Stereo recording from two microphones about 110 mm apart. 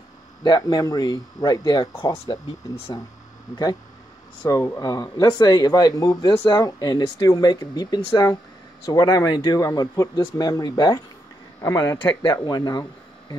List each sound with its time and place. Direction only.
0.4 s speech: 40° left (ahead or behind)
4.5 s speech: 30° left (ahead or behind)
12.1 s speech: 45° left (ahead or behind)